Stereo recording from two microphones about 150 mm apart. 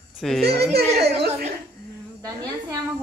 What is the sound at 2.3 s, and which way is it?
Speech, 25° right (ahead or behind).